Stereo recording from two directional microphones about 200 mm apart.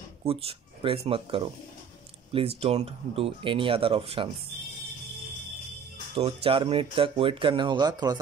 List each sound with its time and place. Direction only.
0.2 s speech: 30° right (ahead or behind)
6.1 s speech: 30° right (ahead or behind)